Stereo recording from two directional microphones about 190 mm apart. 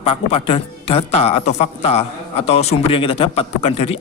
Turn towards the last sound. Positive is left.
turn(degrees=30)  # may be behind; listen again after turning